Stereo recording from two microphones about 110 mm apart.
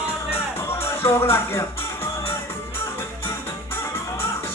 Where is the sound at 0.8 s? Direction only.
20° left (ahead or behind).